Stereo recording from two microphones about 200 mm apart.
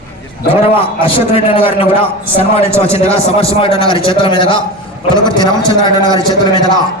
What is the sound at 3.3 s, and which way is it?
A man's voice, 30° left (ahead or behind).